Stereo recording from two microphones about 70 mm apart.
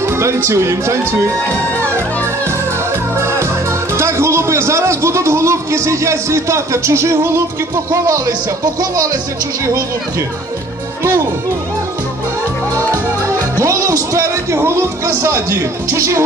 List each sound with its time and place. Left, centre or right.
0.0 s speech: right
3.2 s music: right
3.9 s a man's voice: right
8.3 s speech: right
12.7 s a man's voice: right